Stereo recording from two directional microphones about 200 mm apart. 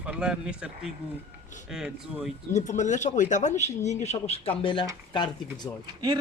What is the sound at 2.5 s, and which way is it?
Speech, 35° left (ahead or behind).